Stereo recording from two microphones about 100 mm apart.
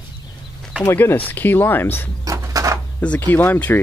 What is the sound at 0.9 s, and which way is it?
Speech, 20° left (ahead or behind).